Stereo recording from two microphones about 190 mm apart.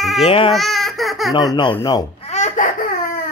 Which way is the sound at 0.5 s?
Centre (ahead or behind).